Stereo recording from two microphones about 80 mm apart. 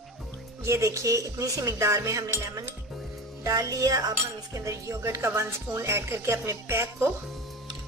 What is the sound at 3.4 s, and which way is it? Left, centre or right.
A woman's voice, right.